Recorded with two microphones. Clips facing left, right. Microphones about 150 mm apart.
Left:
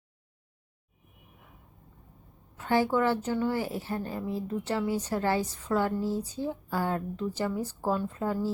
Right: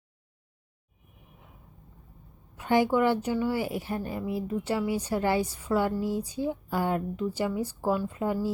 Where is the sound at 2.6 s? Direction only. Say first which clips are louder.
Right 2 dB; 15° right (ahead or behind).